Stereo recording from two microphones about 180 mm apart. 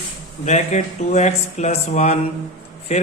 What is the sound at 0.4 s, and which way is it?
A man's voice, 40° left (ahead or behind).